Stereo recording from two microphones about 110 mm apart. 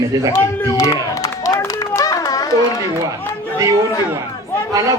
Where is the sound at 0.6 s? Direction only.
30° left (ahead or behind).